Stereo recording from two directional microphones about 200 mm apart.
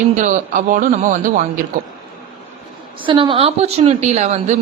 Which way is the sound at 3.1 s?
25° right (ahead or behind).